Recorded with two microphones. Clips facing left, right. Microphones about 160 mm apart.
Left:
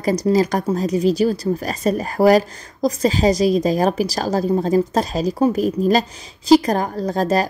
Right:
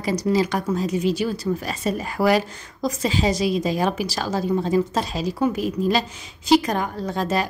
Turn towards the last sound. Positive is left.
turn(degrees=40)  # may be behind; listen again after turning